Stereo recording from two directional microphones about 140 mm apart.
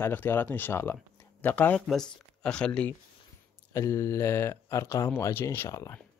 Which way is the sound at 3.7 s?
20° left (ahead or behind).